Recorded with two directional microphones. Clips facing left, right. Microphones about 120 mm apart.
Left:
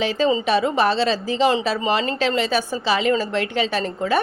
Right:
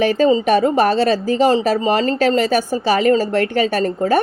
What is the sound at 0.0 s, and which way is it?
Speech, 50° right (ahead or behind).